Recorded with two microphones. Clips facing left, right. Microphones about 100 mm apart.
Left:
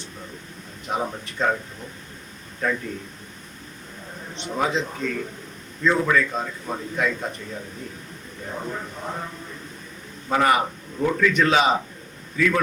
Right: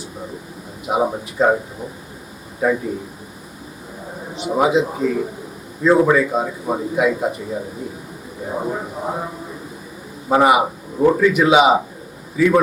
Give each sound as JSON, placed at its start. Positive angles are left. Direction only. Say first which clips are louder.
{"t": 0.9, "sound": "speech", "louder": "right 8 dB", "side_deg": -10}
{"t": 4.3, "sound": "speech", "louder": "right 8 dB", "side_deg": -10}
{"t": 10.9, "sound": "a man's voice", "louder": "right 9 dB", "side_deg": -30}
{"t": 11.2, "sound": "speech", "louder": "right 4 dB", "side_deg": -10}